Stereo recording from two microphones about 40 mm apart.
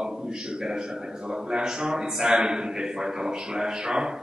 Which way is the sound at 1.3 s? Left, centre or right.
Centre.